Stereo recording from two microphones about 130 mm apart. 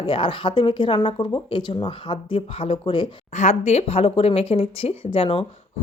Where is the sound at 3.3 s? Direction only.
60° left (ahead or behind).